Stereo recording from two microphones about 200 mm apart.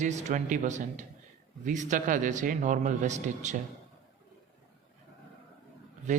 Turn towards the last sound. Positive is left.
turn(degrees=-35)  # may be behind; listen again after turning